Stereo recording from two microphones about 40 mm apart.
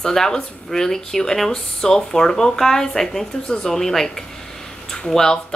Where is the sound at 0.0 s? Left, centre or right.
Centre.